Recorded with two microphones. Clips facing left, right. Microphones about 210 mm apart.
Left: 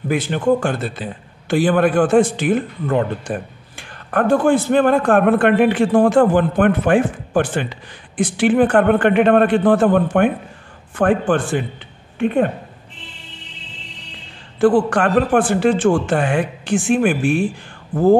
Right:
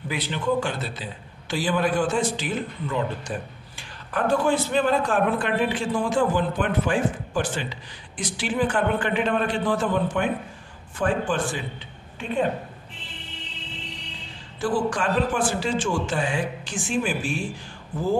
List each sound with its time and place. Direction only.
0.1 s a man's voice: 50° left (ahead or behind)
14.6 s a man's voice: 60° left (ahead or behind)